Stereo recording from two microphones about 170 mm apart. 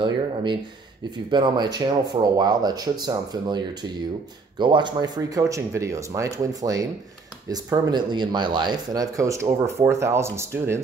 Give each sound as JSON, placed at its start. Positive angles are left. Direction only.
{"t": 0.0, "sound": "speech", "side_deg": -30}